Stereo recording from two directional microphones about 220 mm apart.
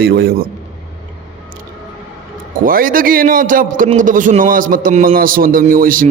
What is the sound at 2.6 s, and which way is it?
A man's voice, 40° right (ahead or behind).